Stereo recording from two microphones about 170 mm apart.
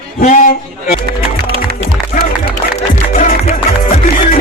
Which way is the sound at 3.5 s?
40° left (ahead or behind).